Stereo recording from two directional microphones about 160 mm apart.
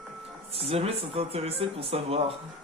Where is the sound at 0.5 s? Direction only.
35° right (ahead or behind).